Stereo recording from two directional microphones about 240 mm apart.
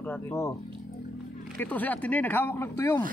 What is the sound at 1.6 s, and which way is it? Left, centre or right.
Speech, centre.